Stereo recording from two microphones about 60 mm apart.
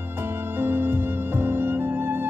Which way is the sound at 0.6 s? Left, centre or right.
Right.